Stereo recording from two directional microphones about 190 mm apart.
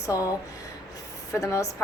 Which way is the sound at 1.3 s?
15° left (ahead or behind).